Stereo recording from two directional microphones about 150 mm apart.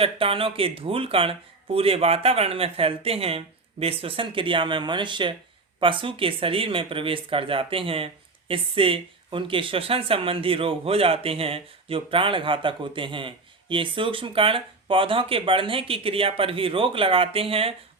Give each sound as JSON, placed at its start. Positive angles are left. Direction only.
{"t": 0.0, "sound": "speech", "side_deg": -40}